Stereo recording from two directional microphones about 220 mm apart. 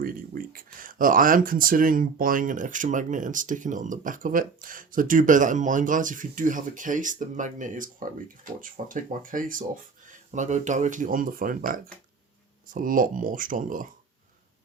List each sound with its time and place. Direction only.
0.0 s speech: 40° right (ahead or behind)